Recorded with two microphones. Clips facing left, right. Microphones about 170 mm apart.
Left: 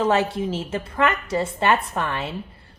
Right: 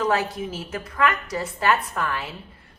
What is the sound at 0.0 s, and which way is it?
A woman's voice, 25° left (ahead or behind).